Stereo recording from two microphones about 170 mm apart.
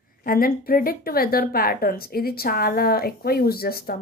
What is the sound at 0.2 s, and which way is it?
A woman's voice, 60° left (ahead or behind).